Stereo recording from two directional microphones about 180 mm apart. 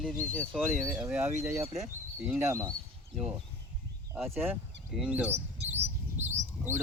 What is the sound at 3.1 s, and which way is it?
Speech, 5° right (ahead or behind).